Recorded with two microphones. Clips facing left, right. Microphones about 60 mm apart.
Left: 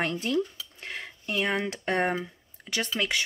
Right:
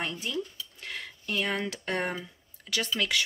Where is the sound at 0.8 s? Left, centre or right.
Left.